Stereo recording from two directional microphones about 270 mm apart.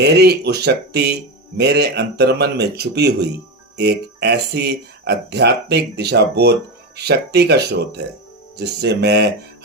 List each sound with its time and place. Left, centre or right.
0.0 s speech: right